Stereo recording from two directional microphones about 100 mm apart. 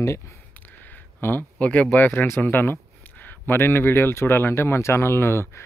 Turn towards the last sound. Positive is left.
turn(degrees=25)  # may be behind; listen again after turning